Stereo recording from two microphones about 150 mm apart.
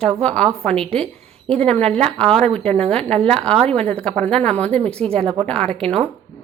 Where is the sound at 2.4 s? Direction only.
45° right (ahead or behind).